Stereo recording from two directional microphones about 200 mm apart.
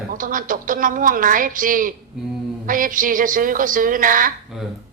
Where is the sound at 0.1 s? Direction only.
45° right (ahead or behind).